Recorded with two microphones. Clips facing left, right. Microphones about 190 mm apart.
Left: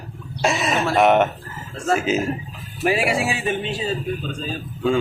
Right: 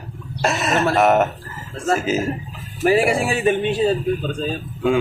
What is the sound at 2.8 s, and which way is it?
Speech, 45° right (ahead or behind).